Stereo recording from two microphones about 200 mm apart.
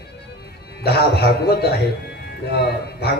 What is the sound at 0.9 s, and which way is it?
A man's voice, 55° left (ahead or behind).